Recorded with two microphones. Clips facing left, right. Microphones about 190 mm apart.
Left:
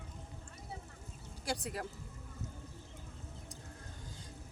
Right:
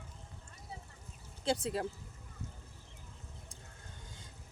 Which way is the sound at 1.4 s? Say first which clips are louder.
Right 6 dB; 25° right (ahead or behind).